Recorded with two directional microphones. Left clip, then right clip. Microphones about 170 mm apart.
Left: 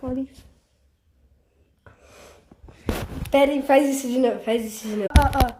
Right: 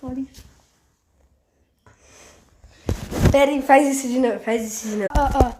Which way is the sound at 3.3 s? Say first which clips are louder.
Right 2 dB; 10° right (ahead or behind).